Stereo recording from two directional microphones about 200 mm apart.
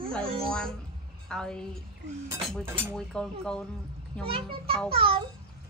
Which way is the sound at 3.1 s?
5° left (ahead or behind).